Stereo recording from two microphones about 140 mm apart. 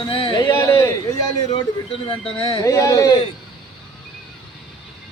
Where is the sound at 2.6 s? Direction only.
20° left (ahead or behind).